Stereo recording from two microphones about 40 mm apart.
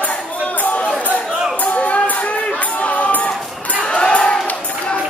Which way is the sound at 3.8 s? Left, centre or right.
Left.